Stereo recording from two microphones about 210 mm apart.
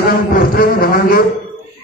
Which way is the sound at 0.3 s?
45° left (ahead or behind).